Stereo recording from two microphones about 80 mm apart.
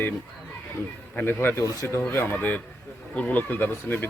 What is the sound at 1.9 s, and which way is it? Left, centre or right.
A man's voice, left.